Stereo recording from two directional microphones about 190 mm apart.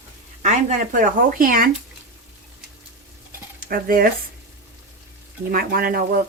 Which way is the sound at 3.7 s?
50° right (ahead or behind).